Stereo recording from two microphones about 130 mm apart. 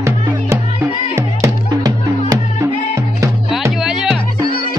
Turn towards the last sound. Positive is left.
turn(degrees=-5)  # may be behind; listen again after turning